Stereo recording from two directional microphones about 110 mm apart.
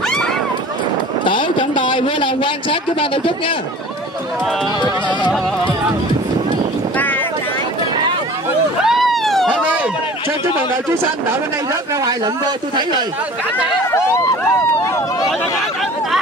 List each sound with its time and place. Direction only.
1.2 s a man's voice: 45° left (ahead or behind)
8.8 s a sound: centre (ahead or behind)
9.5 s run: 15° right (ahead or behind)
12.0 s speech: 40° right (ahead or behind)